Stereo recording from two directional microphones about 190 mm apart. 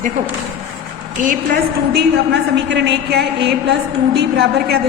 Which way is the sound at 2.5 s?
65° right (ahead or behind).